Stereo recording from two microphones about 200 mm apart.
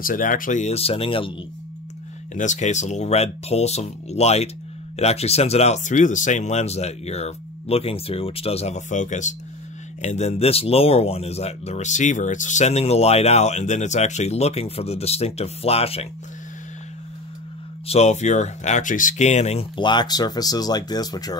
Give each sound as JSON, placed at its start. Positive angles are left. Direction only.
{"t": 0.0, "sound": "speech", "side_deg": 45}
{"t": 2.3, "sound": "speech", "side_deg": 40}
{"t": 17.8, "sound": "speech", "side_deg": 35}